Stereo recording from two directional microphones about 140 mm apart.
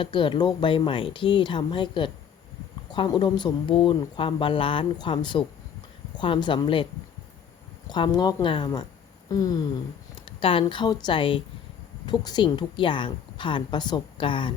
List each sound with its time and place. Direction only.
0.0 s speech: 35° left (ahead or behind)
7.9 s speech: 30° left (ahead or behind)
9.3 s a sound: 25° left (ahead or behind)
10.2 s a woman's voice: 40° left (ahead or behind)